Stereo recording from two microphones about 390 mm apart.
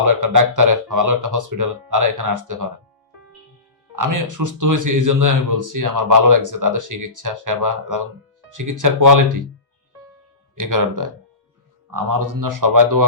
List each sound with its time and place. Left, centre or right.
0.0 s a man's voice: right
3.9 s a man's voice: right
10.5 s a man's voice: right